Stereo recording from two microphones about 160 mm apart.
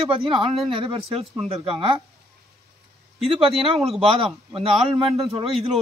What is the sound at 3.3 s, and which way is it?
Speech, 35° right (ahead or behind).